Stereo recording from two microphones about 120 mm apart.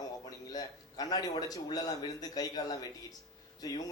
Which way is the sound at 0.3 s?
30° left (ahead or behind).